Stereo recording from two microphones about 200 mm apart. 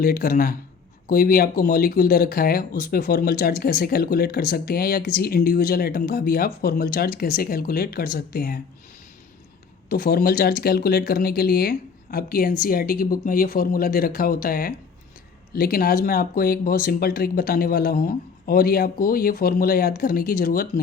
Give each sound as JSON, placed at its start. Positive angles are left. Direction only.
{"t": 0.0, "sound": "speech", "side_deg": 50}
{"t": 9.9, "sound": "speech", "side_deg": 50}